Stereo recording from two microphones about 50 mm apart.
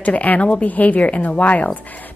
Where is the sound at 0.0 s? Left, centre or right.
Left.